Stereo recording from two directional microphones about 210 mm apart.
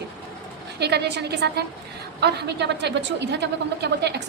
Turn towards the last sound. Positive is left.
turn(degrees=-55)  # may be behind; listen again after turning